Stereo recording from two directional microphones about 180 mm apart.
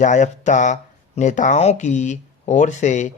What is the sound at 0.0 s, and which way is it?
A man's voice, 45° left (ahead or behind).